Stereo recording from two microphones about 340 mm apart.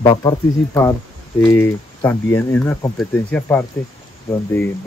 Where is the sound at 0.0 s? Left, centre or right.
Centre.